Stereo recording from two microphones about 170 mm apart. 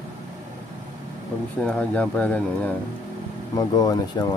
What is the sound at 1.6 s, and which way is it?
Speech, 5° left (ahead or behind).